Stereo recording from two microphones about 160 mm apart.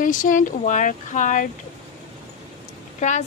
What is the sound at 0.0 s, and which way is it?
A woman's voice, 55° left (ahead or behind).